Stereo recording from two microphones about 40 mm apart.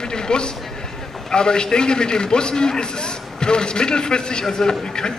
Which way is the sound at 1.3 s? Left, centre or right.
Centre.